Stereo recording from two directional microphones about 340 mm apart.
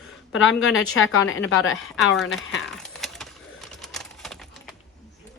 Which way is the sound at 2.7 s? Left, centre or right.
Centre.